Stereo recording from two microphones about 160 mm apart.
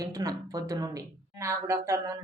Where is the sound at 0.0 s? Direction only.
20° right (ahead or behind).